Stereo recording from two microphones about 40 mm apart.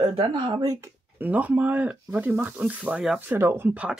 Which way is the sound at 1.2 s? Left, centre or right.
Right.